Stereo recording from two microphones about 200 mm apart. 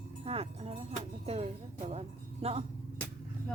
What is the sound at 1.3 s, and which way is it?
Speech, 30° right (ahead or behind).